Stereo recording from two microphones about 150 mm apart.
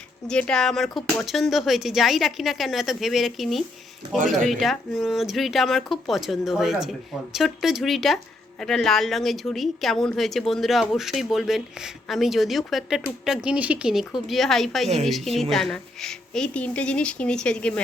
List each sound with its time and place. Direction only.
0.3 s speech: 5° left (ahead or behind)